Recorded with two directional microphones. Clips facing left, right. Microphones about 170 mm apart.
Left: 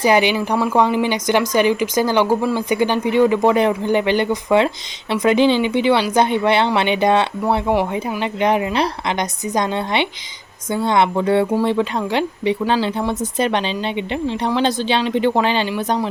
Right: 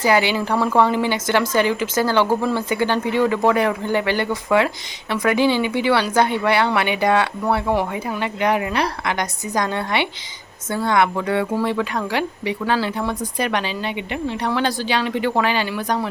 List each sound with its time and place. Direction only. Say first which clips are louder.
0.0 s a woman's voice: left 2 dB; 20° left (ahead or behind)